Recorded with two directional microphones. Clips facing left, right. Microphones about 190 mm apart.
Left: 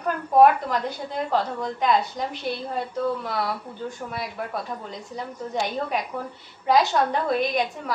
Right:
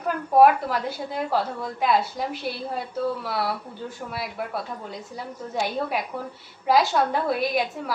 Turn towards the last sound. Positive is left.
turn(degrees=-5)  # may be behind; listen again after turning